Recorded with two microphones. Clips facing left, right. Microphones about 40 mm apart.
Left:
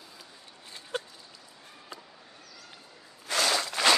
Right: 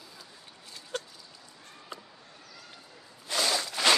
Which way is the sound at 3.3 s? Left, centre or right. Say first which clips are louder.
Left 2 dB; left.